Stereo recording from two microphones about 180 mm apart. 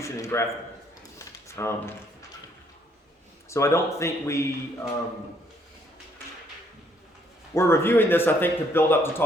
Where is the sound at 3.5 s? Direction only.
15° left (ahead or behind).